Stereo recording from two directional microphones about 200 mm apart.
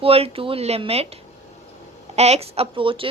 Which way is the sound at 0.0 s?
30° right (ahead or behind).